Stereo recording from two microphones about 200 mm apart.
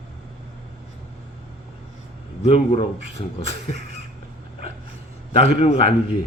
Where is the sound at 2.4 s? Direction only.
30° left (ahead or behind).